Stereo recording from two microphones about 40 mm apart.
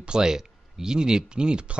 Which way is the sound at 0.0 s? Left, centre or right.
Centre.